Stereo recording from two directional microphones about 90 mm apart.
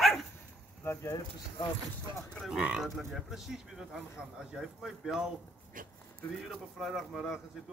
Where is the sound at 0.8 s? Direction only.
30° left (ahead or behind).